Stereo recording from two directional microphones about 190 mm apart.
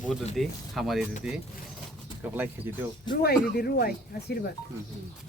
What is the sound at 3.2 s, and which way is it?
Speech, 55° left (ahead or behind).